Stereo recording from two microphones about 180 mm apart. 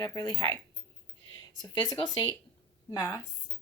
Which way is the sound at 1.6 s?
20° left (ahead or behind).